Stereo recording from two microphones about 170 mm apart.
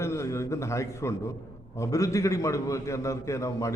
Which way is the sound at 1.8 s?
20° left (ahead or behind).